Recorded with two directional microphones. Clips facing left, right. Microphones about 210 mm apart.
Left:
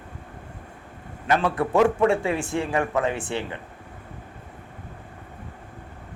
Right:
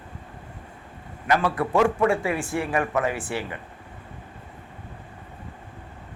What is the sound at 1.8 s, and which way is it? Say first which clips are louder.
Speech: left 2 dB; 30° left (ahead or behind).